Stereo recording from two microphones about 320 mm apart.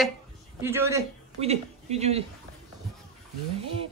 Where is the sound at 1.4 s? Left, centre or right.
Centre.